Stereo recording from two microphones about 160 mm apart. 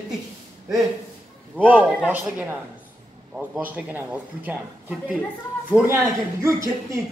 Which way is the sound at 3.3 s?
5° right (ahead or behind).